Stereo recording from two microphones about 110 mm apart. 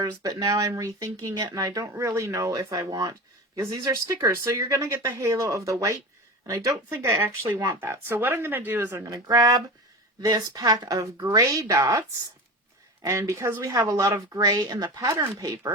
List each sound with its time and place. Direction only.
0.0 s a woman's voice: 35° right (ahead or behind)
9.1 s a woman's voice: 40° right (ahead or behind)